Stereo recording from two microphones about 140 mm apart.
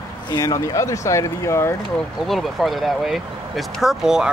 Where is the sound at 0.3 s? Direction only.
25° left (ahead or behind).